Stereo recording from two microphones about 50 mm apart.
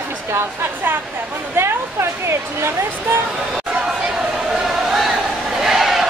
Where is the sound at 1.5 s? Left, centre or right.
Right.